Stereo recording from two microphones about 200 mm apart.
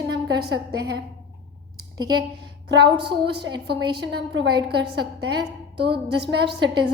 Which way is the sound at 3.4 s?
55° right (ahead or behind).